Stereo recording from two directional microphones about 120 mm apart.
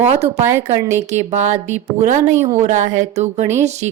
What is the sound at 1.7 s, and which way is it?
Music, 85° right.